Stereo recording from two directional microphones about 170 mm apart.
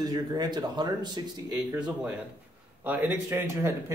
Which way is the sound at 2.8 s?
10° right (ahead or behind).